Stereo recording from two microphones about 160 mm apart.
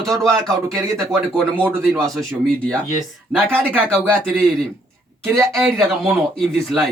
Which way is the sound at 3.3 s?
10° right (ahead or behind).